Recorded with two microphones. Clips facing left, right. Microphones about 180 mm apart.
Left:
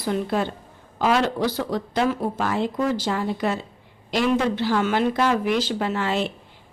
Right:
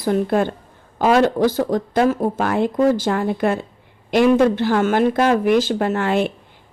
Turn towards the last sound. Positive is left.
turn(degrees=-55)  # may be behind; listen again after turning